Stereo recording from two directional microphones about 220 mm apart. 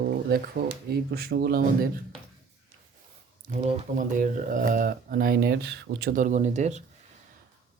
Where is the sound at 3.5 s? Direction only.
35° right (ahead or behind).